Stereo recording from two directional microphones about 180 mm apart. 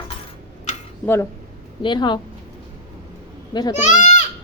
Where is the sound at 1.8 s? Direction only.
25° left (ahead or behind).